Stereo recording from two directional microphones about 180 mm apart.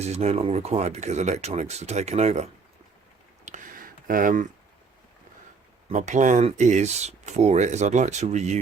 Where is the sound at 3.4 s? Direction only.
45° right (ahead or behind).